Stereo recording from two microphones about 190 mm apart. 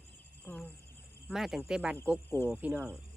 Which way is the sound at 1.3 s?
Centre (ahead or behind).